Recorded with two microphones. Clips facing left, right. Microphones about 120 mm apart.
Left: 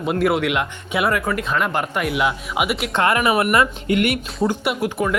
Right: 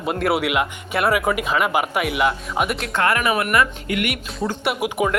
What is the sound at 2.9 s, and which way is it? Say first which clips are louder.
Speech: left 2 dB; 20° left (ahead or behind).